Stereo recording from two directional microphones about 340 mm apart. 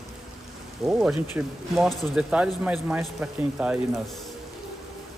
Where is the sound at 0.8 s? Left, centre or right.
Centre.